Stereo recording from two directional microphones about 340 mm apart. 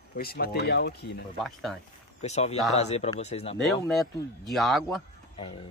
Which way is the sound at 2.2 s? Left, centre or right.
Centre.